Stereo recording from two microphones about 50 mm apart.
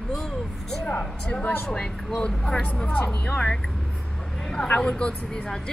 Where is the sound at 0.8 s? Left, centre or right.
Left.